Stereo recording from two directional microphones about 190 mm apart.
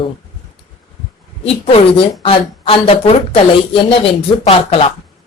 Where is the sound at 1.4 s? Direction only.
30° left (ahead or behind).